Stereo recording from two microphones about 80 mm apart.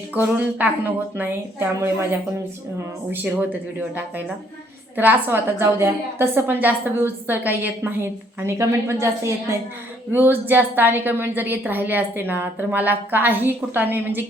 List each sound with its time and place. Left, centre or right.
0.1 s a woman's voice: centre
8.4 s a woman's voice: right
10.1 s a woman's voice: right